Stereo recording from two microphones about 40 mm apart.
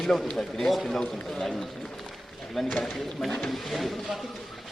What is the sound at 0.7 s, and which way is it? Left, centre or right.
Speech, centre.